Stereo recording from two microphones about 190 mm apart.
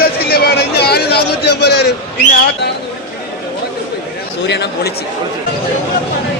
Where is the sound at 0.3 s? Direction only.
55° left (ahead or behind).